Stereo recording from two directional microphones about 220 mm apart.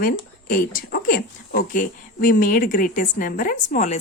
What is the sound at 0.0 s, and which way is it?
A woman's voice, 40° left (ahead or behind).